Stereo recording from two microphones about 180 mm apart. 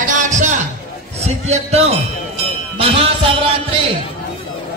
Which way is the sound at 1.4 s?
35° right (ahead or behind).